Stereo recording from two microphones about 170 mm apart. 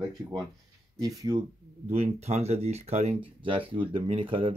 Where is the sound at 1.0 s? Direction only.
20° right (ahead or behind).